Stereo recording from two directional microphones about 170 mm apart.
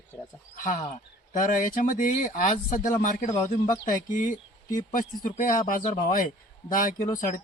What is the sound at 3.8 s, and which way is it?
Speech, 50° left (ahead or behind).